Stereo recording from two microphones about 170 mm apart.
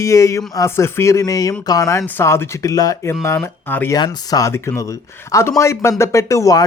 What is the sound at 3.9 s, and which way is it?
Speech, 20° left (ahead or behind).